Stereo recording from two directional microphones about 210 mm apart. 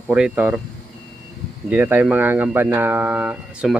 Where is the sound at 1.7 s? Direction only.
5° right (ahead or behind).